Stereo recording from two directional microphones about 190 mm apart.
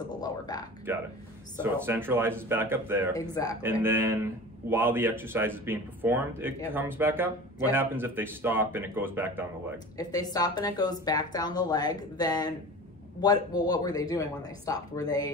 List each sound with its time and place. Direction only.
0.1 s speech: 20° left (ahead or behind)
0.9 s speech: 10° right (ahead or behind)
3.2 s speech: 20° left (ahead or behind)
3.8 s speech: 10° right (ahead or behind)
9.9 s speech: 20° left (ahead or behind)